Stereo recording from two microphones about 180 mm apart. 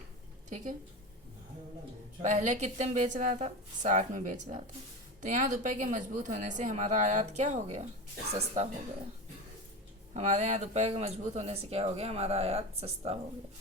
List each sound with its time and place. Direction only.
0.5 s speech: 45° right (ahead or behind)
2.2 s speech: 40° right (ahead or behind)
10.2 s speech: 40° right (ahead or behind)